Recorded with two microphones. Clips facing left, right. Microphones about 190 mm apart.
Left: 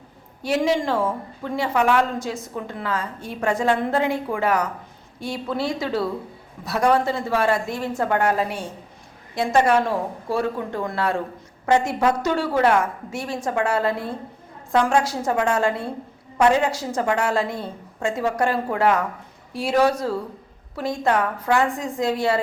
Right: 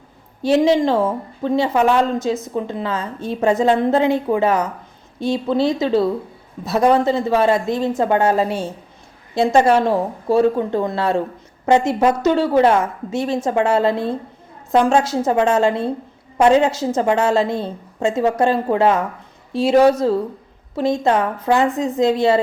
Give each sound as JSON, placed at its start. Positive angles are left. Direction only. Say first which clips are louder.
{"t": 0.4, "sound": "a woman's voice", "louder": "right 6 dB", "side_deg": -25}